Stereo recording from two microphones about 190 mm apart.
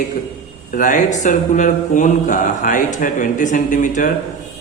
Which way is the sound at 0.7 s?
45° left (ahead or behind).